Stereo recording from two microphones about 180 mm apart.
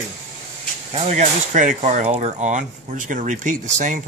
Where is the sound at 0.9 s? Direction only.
35° right (ahead or behind).